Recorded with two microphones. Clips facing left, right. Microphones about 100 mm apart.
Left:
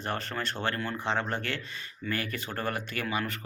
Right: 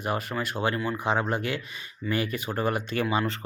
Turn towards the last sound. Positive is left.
turn(degrees=-25)  # may be behind; listen again after turning